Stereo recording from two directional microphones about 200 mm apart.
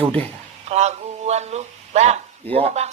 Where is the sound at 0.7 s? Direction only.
35° right (ahead or behind).